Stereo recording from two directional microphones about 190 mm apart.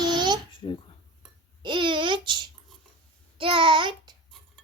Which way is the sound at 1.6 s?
25° right (ahead or behind).